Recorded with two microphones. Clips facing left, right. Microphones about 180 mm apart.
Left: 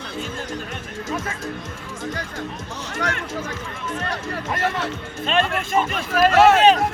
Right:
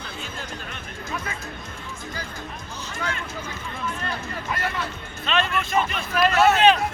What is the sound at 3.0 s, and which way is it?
Speech, 75° left (ahead or behind).